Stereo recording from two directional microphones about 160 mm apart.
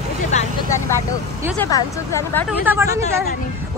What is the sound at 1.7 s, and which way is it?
Speech, 20° left (ahead or behind).